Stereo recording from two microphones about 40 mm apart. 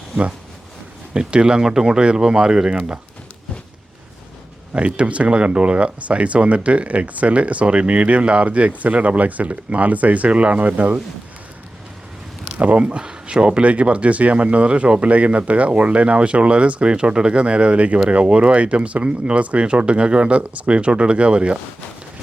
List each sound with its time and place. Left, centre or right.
1.1 s speech: right
4.7 s speech: right
12.5 s speech: right